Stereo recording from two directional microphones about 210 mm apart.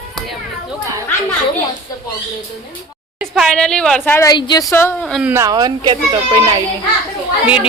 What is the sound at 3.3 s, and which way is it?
A woman's voice, centre (ahead or behind).